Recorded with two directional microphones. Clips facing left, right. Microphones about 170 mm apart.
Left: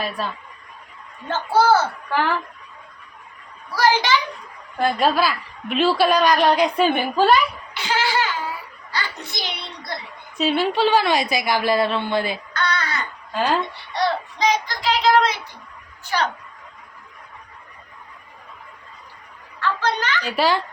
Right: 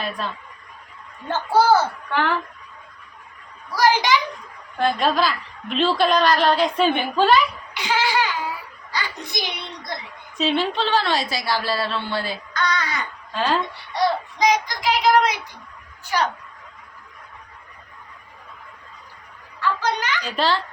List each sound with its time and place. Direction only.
1.3 s child singing: 15° right (ahead or behind)
2.0 s speech: 5° left (ahead or behind)
3.8 s child singing: 15° right (ahead or behind)
4.8 s a woman's voice: 10° left (ahead or behind)
7.7 s child singing: 15° right (ahead or behind)
10.3 s a woman's voice: 10° left (ahead or behind)
12.5 s child singing: 15° right (ahead or behind)
13.3 s a woman's voice: 10° left (ahead or behind)
13.9 s child singing: 15° right (ahead or behind)
19.5 s a woman's voice: 10° right (ahead or behind)
20.2 s a woman's voice: 10° left (ahead or behind)